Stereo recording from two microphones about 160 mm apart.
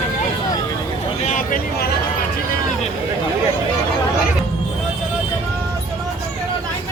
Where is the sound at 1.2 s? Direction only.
50° left (ahead or behind).